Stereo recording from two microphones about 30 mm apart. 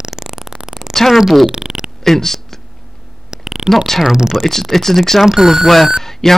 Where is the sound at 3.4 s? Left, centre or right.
Right.